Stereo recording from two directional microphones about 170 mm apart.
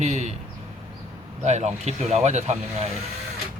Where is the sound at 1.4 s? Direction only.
40° right (ahead or behind).